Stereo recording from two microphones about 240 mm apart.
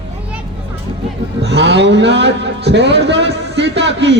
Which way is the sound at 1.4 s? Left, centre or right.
Right.